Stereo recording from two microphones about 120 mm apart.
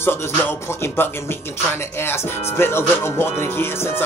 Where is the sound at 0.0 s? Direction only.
20° left (ahead or behind).